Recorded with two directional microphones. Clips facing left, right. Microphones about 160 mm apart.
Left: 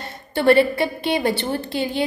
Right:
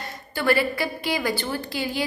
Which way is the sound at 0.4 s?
25° left (ahead or behind).